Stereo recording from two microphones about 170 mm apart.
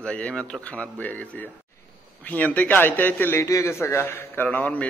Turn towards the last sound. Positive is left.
turn(degrees=10)  # may be behind; listen again after turning